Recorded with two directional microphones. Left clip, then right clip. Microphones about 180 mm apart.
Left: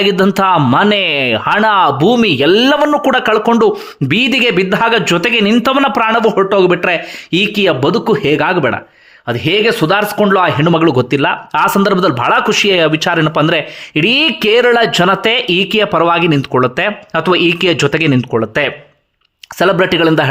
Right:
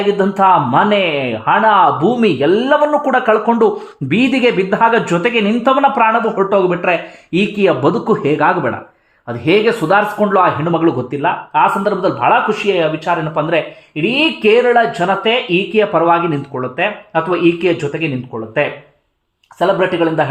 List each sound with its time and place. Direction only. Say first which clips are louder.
0.2 s a man's voice: even; 25° left (ahead or behind)